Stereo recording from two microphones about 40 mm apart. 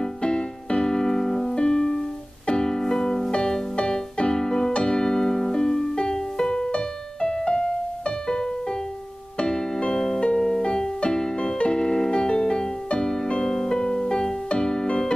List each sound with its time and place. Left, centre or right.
0.0 s keyboard: centre
4.7 s piano: centre
9.4 s music: left